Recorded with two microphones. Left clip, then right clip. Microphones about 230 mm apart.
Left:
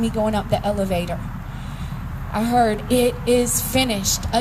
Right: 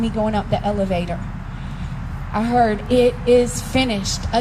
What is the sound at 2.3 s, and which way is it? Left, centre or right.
A woman's voice, left.